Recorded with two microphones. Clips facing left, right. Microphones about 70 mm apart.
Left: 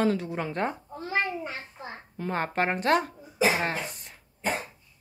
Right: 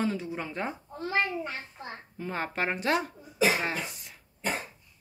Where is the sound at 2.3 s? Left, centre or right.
Left.